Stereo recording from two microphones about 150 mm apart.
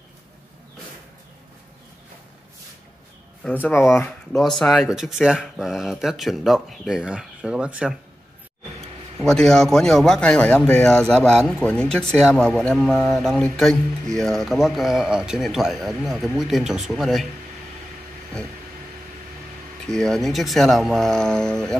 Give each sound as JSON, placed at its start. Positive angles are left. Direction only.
{"t": 4.3, "sound": "speech", "side_deg": 5}
{"t": 9.3, "sound": "speech", "side_deg": 5}
{"t": 19.9, "sound": "speech", "side_deg": 5}